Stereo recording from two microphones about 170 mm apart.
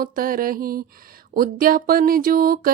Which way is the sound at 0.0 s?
55° right (ahead or behind).